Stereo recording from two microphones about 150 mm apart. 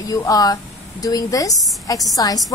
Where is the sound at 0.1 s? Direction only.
25° left (ahead or behind).